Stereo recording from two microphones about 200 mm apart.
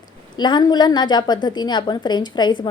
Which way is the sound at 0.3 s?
20° left (ahead or behind).